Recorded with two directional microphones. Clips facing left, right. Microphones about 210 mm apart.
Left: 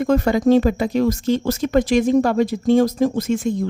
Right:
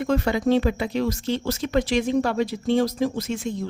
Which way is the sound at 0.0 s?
45° left (ahead or behind).